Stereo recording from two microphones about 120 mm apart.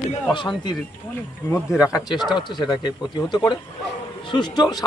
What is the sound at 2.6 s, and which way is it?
A man's voice, 40° left (ahead or behind).